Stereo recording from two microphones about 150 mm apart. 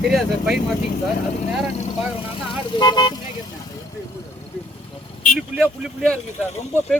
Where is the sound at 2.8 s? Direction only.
30° left (ahead or behind).